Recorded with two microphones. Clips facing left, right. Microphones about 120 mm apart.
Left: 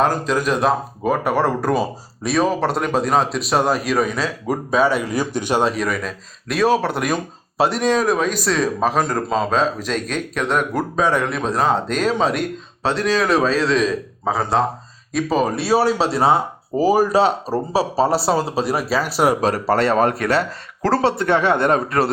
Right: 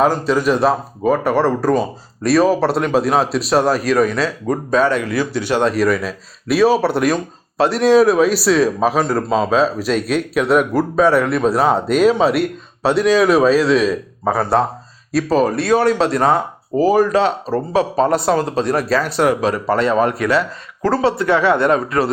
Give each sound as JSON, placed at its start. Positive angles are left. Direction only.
{"t": 0.0, "sound": "speech", "side_deg": 0}
{"t": 5.6, "sound": "speech", "side_deg": 0}
{"t": 19.4, "sound": "speech", "side_deg": 35}
{"t": 19.7, "sound": "speech", "side_deg": 65}
{"t": 20.0, "sound": "speech", "side_deg": 45}
{"t": 21.6, "sound": "a man's voice", "side_deg": 55}